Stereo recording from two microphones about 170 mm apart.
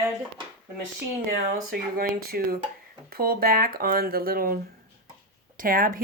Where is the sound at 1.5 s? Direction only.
60° right (ahead or behind).